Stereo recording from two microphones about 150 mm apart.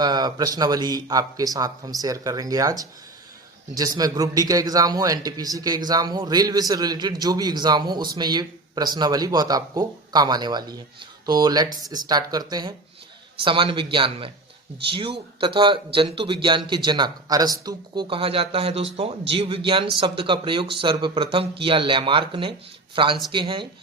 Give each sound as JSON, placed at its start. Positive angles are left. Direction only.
{"t": 0.0, "sound": "a man's voice", "side_deg": -30}